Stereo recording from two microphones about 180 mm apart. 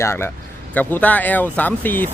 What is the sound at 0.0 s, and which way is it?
Speech, 15° left (ahead or behind).